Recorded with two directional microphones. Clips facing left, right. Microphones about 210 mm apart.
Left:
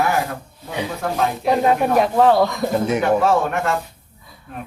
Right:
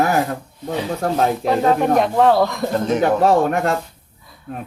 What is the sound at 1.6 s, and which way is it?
Speech, 5° left (ahead or behind).